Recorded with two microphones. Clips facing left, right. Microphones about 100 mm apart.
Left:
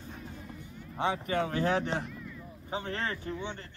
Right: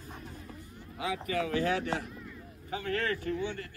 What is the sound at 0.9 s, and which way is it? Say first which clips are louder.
Speech: left 3 dB; 35° left (ahead or behind).